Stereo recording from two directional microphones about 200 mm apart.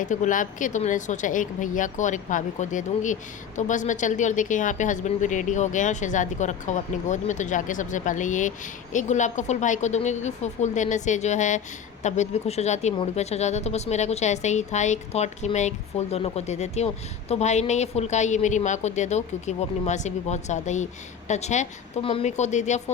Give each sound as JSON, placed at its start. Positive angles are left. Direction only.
{"t": 0.0, "sound": "a woman's voice", "side_deg": 40}